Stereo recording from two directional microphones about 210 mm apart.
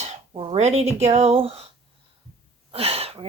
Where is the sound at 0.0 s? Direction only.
30° right (ahead or behind).